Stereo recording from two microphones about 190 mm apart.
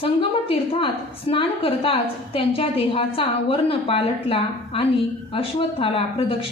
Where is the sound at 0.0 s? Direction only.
30° left (ahead or behind).